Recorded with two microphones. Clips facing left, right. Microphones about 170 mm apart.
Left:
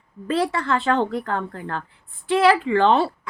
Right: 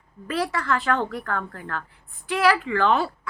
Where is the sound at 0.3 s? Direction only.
25° left (ahead or behind).